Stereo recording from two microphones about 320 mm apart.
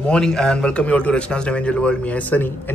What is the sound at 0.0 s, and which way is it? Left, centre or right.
A man's voice, centre.